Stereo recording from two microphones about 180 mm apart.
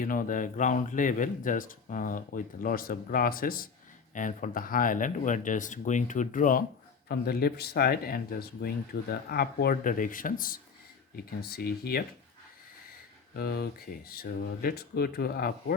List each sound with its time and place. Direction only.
0.0 s speech: 50° left (ahead or behind)
13.3 s speech: 60° left (ahead or behind)